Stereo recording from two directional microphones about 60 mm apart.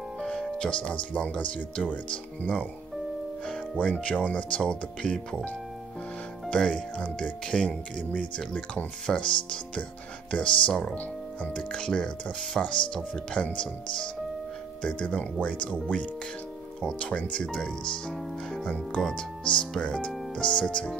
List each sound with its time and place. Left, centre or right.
0.2 s speech: centre
6.5 s speech: centre
18.9 s speech: centre
19.4 s speech: centre